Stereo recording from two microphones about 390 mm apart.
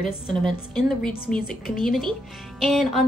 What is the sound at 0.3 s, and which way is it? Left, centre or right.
A woman's voice, centre.